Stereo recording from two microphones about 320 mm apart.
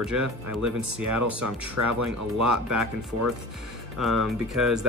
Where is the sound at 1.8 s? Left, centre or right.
Right.